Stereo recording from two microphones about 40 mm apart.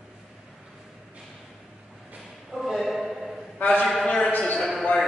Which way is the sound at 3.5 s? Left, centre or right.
Left.